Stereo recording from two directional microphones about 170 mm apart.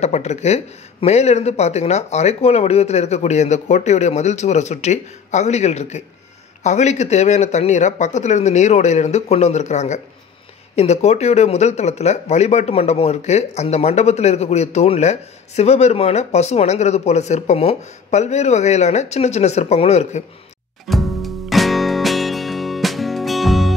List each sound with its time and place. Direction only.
0.0 s speech: 40° left (ahead or behind)
20.9 s music: centre (ahead or behind)